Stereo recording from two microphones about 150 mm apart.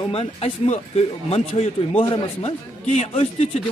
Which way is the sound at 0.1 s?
40° left (ahead or behind).